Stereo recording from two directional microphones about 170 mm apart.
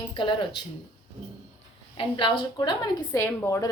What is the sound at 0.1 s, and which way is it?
Speech, 30° left (ahead or behind).